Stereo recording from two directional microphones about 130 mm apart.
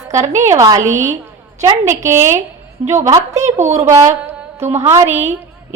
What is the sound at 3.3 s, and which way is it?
A woman's voice, 65° right (ahead or behind).